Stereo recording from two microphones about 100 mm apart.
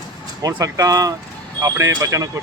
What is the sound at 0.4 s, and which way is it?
Speech, 35° right (ahead or behind).